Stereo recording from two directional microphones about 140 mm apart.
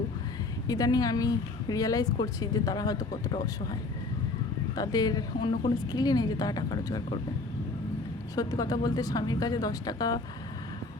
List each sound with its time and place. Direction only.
0.7 s speech: 25° left (ahead or behind)
8.4 s speech: 25° left (ahead or behind)